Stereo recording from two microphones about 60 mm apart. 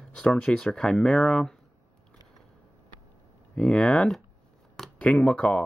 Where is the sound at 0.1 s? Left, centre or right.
Centre.